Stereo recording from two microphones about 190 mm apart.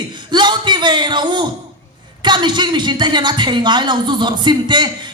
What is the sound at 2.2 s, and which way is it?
A woman's voice, 25° right (ahead or behind).